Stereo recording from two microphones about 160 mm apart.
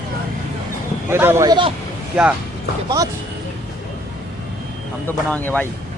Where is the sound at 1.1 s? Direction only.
15° right (ahead or behind).